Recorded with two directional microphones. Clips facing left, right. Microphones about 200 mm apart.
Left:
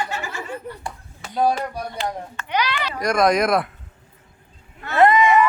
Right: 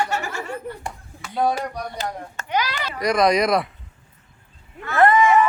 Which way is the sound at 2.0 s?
45° right (ahead or behind).